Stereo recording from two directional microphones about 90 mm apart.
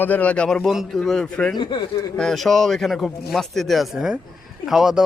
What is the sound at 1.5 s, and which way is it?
Speech, 55° left (ahead or behind).